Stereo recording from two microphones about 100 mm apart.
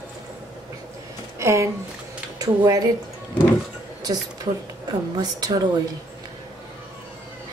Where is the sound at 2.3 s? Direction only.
35° right (ahead or behind).